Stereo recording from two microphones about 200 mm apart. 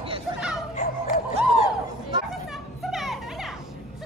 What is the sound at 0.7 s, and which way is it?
Music, 45° left (ahead or behind).